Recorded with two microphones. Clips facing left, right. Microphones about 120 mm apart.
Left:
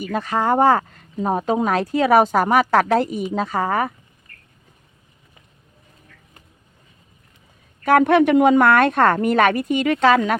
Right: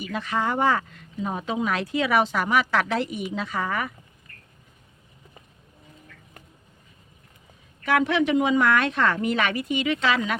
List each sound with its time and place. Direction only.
0.0 s speech: 45° left (ahead or behind)
7.9 s speech: 50° left (ahead or behind)